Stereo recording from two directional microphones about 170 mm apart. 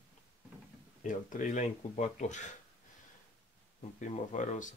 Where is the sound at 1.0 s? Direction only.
50° left (ahead or behind).